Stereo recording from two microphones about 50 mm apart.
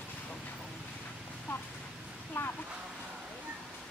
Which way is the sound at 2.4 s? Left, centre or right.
Left.